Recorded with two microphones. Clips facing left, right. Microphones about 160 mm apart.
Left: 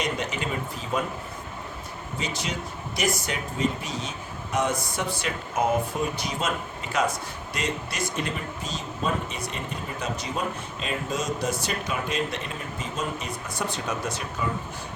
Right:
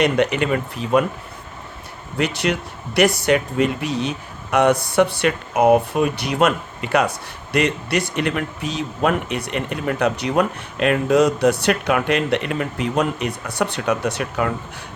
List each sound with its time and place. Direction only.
0.0 s speech: 70° right (ahead or behind)
2.1 s speech: 70° right (ahead or behind)